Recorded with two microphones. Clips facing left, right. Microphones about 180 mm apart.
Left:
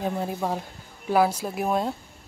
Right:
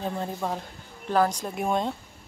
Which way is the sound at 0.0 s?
10° left (ahead or behind).